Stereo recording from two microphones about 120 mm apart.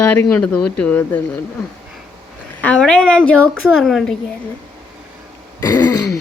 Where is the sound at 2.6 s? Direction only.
10° left (ahead or behind).